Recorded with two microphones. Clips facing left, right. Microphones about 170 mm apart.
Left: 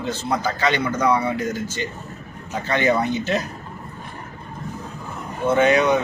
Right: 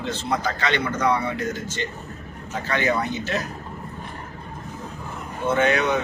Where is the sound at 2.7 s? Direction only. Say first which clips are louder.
Left 4 dB; 20° left (ahead or behind).